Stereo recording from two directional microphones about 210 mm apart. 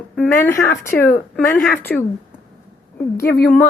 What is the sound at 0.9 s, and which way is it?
Speech, 45° left (ahead or behind).